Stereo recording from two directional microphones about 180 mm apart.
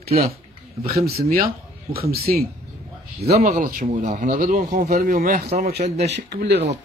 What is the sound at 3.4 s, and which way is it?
Speech, 45° right (ahead or behind).